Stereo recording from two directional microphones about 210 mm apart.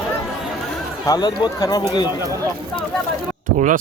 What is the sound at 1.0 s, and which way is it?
Speech, 20° left (ahead or behind).